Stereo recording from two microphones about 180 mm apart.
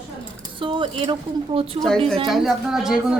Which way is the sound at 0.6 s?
25° right (ahead or behind).